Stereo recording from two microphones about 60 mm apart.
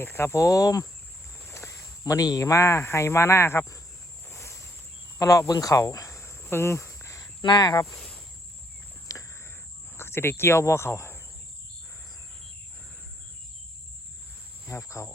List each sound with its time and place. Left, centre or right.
0.0 s speech: left
1.5 s a sound: left
2.4 s speech: left
4.3 s a sound: left
5.2 s speech: left
6.3 s cricket: left
7.9 s cricket: centre
9.1 s cricket: left
10.0 s speech: left
14.7 s cricket: left